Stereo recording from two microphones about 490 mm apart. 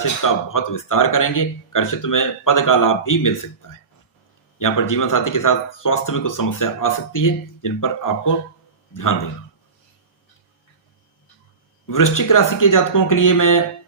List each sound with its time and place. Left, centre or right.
0.0 s a man's voice: left
11.9 s speech: left